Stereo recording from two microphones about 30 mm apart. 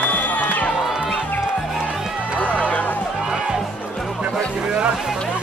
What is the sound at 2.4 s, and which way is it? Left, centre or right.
Music, left.